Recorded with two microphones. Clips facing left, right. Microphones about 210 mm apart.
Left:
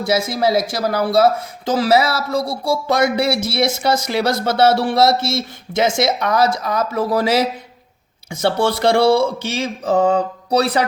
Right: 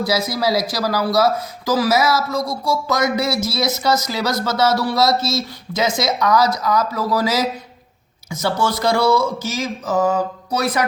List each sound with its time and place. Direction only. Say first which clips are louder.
0.0 s speech: left 2 dB; 25° left (ahead or behind)